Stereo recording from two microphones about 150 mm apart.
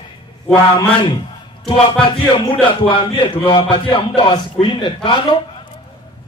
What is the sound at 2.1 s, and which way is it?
A man's voice, 35° left (ahead or behind).